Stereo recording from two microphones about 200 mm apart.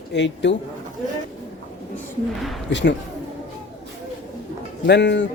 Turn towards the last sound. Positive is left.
turn(degrees=60)  # may be behind; listen again after turning